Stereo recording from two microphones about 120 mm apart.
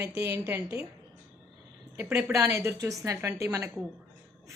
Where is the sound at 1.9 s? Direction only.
10° right (ahead or behind).